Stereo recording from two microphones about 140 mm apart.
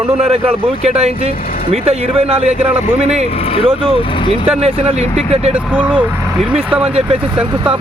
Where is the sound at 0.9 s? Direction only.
45° right (ahead or behind).